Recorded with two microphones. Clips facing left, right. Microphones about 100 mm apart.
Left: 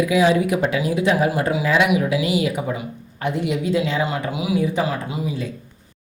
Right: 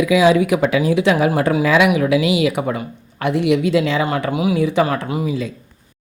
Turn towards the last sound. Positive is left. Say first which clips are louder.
# right 5 dB
turn(degrees=-70)  # may be behind; listen again after turning